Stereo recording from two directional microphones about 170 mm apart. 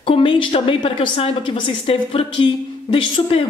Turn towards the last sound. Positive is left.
turn(degrees=30)  # may be behind; listen again after turning